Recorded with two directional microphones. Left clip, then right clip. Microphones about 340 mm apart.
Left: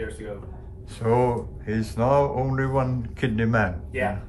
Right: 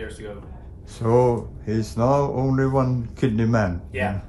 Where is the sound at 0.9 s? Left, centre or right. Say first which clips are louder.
Right 3 dB; centre.